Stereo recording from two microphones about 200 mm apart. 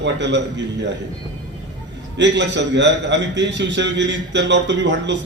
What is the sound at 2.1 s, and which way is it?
A man's voice, 60° right (ahead or behind).